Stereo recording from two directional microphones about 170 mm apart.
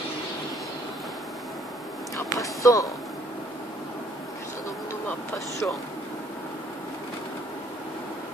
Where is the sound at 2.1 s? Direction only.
20° left (ahead or behind).